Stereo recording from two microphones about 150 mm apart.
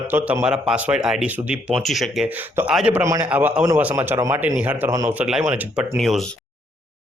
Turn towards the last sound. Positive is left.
turn(degrees=0)  # may be behind; listen again after turning